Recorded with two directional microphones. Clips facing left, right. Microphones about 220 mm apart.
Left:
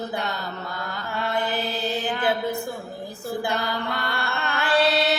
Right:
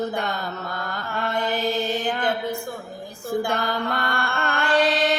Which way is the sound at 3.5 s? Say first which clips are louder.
Right 2 dB; 50° right (ahead or behind).